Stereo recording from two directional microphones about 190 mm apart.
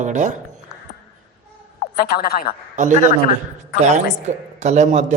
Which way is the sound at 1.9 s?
50° left (ahead or behind).